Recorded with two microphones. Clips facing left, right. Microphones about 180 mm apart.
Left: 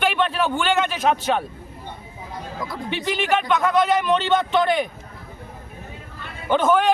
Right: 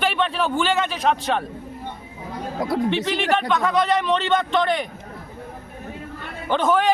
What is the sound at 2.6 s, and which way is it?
Speech, 70° right (ahead or behind).